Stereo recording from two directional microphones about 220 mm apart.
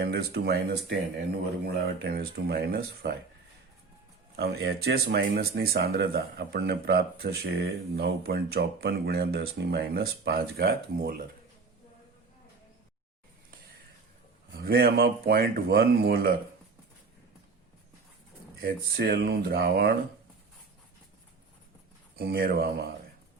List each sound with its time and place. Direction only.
0.0 s speech: 45° right (ahead or behind)
4.4 s speech: 45° right (ahead or behind)
14.5 s speech: 45° right (ahead or behind)
18.6 s speech: 45° right (ahead or behind)
22.1 s speech: 45° right (ahead or behind)